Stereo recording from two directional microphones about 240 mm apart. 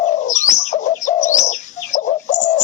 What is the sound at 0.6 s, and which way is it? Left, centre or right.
Bird, left.